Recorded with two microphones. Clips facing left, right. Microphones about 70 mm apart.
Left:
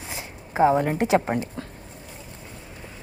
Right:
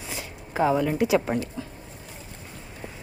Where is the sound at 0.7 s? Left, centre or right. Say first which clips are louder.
Left 1 dB; left.